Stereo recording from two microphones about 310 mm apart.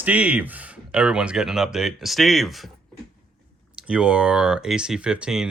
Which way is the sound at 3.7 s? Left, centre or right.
Centre.